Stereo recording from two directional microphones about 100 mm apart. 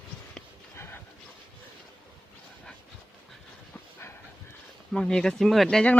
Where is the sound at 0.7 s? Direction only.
25° left (ahead or behind).